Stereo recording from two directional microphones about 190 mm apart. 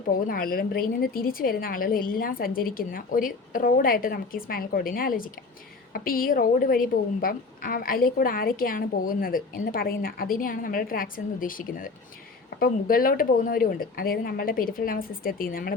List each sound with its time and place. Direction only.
0.3 s a woman's voice: 50° left (ahead or behind)